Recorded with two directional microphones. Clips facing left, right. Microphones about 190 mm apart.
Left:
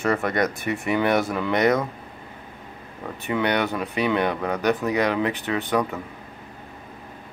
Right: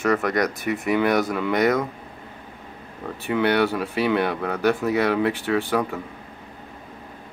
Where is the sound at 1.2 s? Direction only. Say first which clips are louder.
Even; 20° left (ahead or behind).